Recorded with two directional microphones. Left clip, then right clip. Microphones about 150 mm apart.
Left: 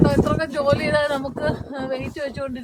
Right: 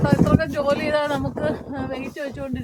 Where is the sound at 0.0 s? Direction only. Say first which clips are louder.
Left 1 dB; 25° left (ahead or behind).